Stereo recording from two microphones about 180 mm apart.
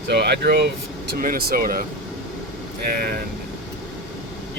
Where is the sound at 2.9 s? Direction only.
55° right (ahead or behind).